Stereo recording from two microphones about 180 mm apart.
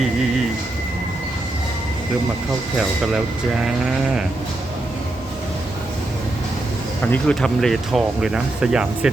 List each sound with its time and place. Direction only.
3.6 s speech: 5° right (ahead or behind)
7.0 s speech: 5° left (ahead or behind)